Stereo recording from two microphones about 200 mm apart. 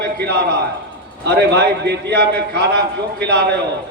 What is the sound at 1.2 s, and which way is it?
A man's voice, 55° right (ahead or behind).